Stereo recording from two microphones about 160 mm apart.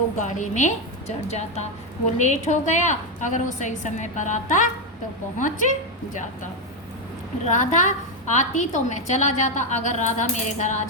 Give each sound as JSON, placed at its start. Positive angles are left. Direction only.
{"t": 0.2, "sound": "a woman's voice", "side_deg": 50}
{"t": 7.4, "sound": "a woman's voice", "side_deg": 50}